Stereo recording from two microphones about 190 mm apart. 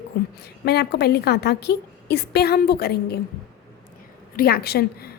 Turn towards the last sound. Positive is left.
turn(degrees=55)  # may be behind; listen again after turning